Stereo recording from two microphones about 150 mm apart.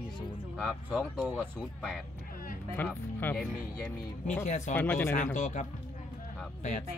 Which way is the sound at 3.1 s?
10° left (ahead or behind).